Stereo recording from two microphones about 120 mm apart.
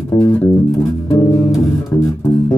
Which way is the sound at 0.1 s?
25° left (ahead or behind).